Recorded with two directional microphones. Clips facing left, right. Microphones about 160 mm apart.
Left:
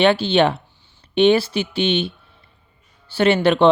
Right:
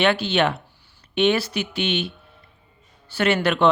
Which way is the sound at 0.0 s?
30° left (ahead or behind).